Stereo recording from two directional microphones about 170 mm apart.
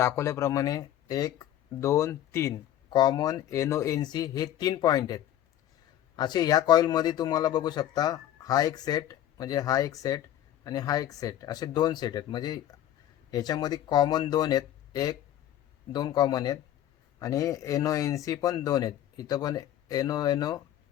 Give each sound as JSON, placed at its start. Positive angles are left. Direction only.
{"t": 0.0, "sound": "speech", "side_deg": 15}